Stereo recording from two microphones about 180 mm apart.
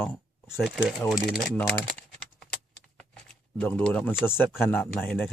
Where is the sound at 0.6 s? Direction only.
5° right (ahead or behind).